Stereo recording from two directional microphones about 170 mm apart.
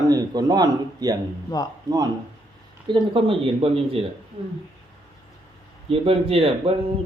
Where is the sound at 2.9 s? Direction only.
30° right (ahead or behind).